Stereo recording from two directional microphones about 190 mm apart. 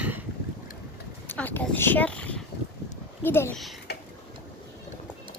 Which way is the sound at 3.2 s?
10° left (ahead or behind).